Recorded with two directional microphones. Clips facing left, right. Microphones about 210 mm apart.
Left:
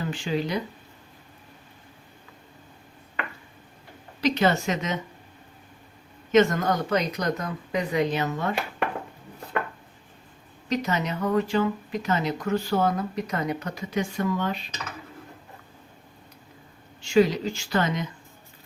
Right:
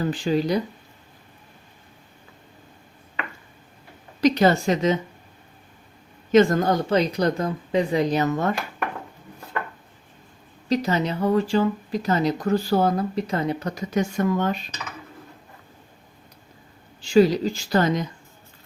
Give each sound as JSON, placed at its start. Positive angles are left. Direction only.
{"t": 0.0, "sound": "speech", "side_deg": -40}
{"t": 4.2, "sound": "speech", "side_deg": -40}
{"t": 6.3, "sound": "speech", "side_deg": -30}
{"t": 10.7, "sound": "speech", "side_deg": -30}
{"t": 17.0, "sound": "speech", "side_deg": -35}